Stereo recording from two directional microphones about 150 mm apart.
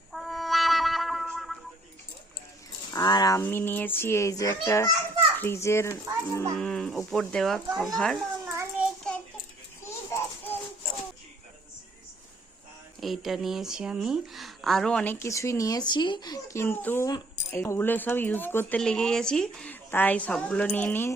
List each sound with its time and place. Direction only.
0.1 s music: centre (ahead or behind)
2.9 s a sound: 25° left (ahead or behind)
3.4 s speech: 15° left (ahead or behind)
6.6 s speech: 5° left (ahead or behind)
8.8 s child singing: 10° right (ahead or behind)
10.1 s a sound: 20° left (ahead or behind)
13.0 s speech: centre (ahead or behind)